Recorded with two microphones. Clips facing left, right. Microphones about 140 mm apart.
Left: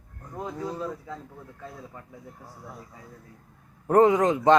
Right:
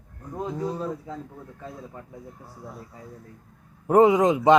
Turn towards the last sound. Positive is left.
turn(degrees=-15)  # may be behind; listen again after turning